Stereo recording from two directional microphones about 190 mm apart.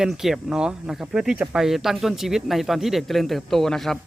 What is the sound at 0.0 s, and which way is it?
Speech, centre (ahead or behind).